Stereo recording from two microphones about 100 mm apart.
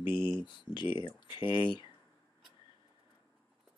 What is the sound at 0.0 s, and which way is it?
Speech, 50° left (ahead or behind).